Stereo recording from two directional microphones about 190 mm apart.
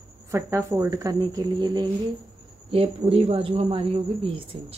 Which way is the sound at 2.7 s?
30° right (ahead or behind).